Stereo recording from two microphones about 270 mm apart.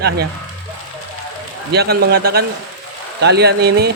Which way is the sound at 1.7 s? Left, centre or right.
Right.